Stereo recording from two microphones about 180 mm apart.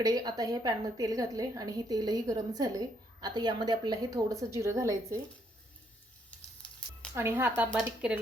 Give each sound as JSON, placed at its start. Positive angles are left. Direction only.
{"t": 0.0, "sound": "a woman's voice", "side_deg": -20}
{"t": 7.1, "sound": "a woman's voice", "side_deg": -15}